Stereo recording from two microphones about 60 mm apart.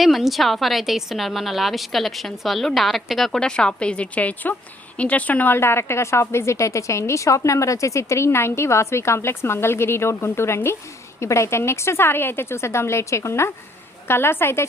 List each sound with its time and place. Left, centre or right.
0.0 s a woman's voice: centre; by 5.5 s left
5.5 s a woman's voice: left